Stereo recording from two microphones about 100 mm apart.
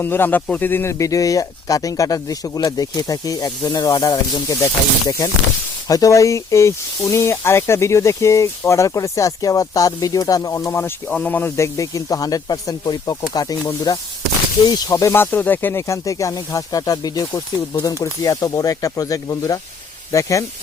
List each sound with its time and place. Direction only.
0.0 s speech: 20° left (ahead or behind)
15.2 s speech: 20° left (ahead or behind)